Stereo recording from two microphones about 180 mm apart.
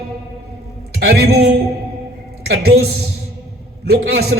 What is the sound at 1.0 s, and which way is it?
Speech, 60° right (ahead or behind).